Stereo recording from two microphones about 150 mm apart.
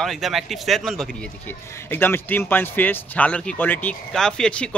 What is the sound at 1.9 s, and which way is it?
A man's voice, 15° left (ahead or behind).